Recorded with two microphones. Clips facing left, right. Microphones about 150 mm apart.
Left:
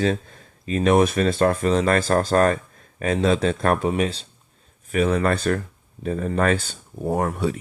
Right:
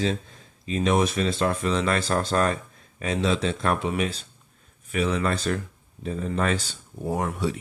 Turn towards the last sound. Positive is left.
turn(degrees=50)  # may be behind; listen again after turning